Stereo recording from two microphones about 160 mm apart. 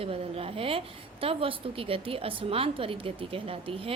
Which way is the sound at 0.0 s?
35° right (ahead or behind).